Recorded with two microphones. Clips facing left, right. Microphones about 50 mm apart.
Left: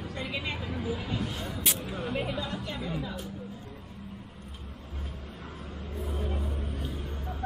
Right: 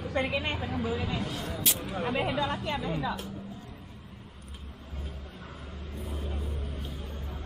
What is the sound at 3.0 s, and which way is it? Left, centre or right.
Speech, right.